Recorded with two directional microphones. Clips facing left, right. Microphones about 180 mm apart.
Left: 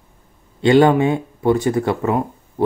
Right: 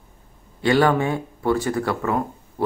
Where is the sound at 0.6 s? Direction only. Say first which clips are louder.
Left 6 dB; 20° left (ahead or behind).